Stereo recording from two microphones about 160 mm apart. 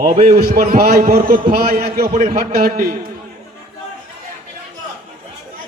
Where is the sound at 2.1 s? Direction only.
60° right (ahead or behind).